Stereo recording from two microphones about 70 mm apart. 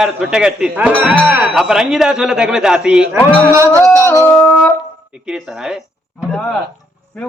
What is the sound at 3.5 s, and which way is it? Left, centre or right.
Music, right.